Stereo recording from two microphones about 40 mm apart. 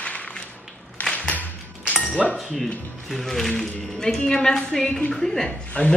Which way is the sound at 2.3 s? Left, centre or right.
Centre.